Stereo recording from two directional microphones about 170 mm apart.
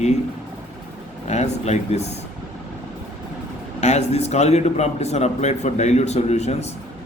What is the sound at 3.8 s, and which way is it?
A man's voice, 40° left (ahead or behind).